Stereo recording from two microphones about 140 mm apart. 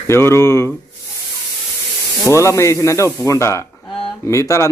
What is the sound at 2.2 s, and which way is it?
Speech, 20° left (ahead or behind).